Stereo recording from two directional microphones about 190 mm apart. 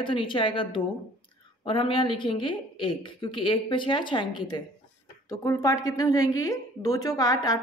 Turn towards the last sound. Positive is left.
turn(degrees=20)  # may be behind; listen again after turning